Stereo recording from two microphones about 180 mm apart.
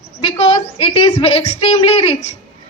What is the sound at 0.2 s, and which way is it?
A woman's voice, 30° left (ahead or behind).